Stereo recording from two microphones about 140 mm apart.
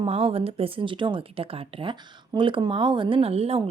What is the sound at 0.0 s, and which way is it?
A woman's voice, 40° right (ahead or behind).